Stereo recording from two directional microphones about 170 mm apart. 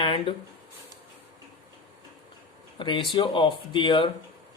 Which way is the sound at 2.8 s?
25° left (ahead or behind).